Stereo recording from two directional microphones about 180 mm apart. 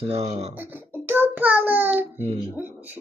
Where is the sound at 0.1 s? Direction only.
35° right (ahead or behind).